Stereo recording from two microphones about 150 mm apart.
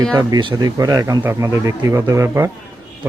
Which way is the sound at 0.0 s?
25° right (ahead or behind).